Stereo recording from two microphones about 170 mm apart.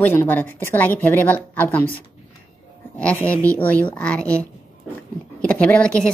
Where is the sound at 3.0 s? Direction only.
10° left (ahead or behind).